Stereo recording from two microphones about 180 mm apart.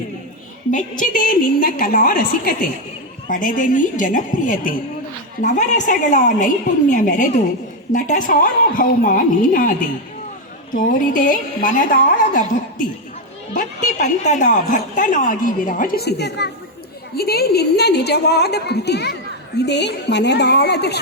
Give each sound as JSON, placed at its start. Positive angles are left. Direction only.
{"t": 0.7, "sound": "a woman's voice", "side_deg": 45}
{"t": 10.8, "sound": "a woman's voice", "side_deg": 45}